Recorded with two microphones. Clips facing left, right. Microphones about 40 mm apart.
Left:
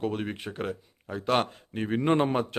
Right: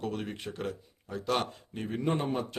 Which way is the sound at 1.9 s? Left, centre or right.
Left.